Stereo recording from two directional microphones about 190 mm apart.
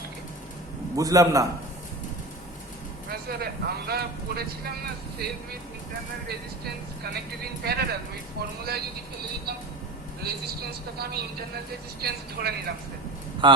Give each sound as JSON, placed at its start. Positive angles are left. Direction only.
{"t": 0.9, "sound": "a man's voice", "side_deg": -20}
{"t": 3.1, "sound": "speech", "side_deg": -55}
{"t": 6.2, "sound": "speech", "side_deg": -55}
{"t": 10.9, "sound": "speech", "side_deg": -55}
{"t": 13.4, "sound": "a man's voice", "side_deg": -25}